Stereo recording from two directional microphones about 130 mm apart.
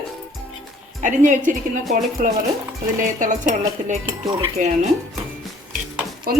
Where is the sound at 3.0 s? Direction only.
75° right (ahead or behind).